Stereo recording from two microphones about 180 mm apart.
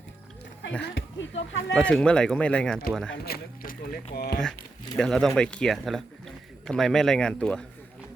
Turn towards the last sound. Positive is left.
turn(degrees=5)  # may be behind; listen again after turning